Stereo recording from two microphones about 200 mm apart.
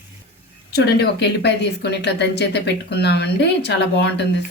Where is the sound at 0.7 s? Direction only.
55° left (ahead or behind).